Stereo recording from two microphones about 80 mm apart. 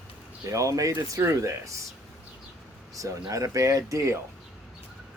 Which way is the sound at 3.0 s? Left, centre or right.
Right.